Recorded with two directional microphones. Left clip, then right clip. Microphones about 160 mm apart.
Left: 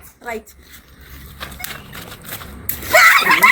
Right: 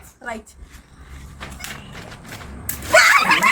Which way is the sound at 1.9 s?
80° left.